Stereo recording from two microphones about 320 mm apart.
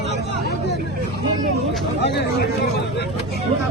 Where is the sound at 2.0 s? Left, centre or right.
Left.